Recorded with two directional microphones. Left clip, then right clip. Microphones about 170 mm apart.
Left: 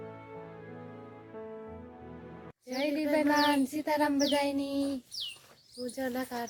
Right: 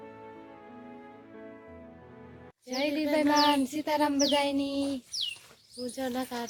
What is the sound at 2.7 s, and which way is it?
Child singing, 25° right (ahead or behind).